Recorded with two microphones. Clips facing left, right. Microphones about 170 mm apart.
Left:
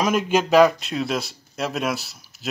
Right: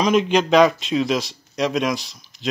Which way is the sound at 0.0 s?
5° left (ahead or behind).